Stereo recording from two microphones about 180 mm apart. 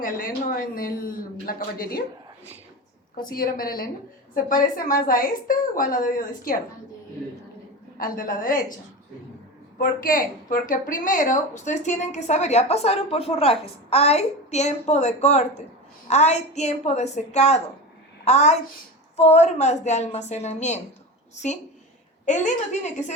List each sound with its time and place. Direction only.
0.0 s a woman's voice: 50° left (ahead or behind)
3.2 s a woman's voice: 55° left (ahead or behind)
7.9 s a woman's voice: 50° left (ahead or behind)
9.7 s a woman's voice: 50° left (ahead or behind)
22.3 s a woman's voice: 40° left (ahead or behind)